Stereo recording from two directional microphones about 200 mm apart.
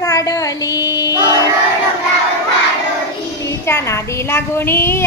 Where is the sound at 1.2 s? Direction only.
15° left (ahead or behind).